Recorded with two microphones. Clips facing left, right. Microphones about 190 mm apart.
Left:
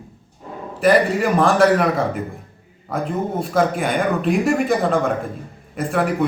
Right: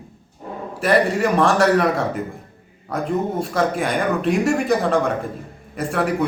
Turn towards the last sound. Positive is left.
turn(degrees=0)  # may be behind; listen again after turning